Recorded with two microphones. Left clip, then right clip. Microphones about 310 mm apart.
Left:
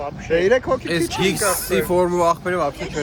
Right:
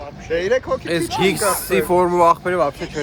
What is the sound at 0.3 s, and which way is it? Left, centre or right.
Speech, centre.